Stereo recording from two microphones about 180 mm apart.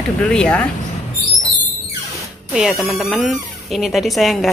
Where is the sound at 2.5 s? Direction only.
Centre (ahead or behind).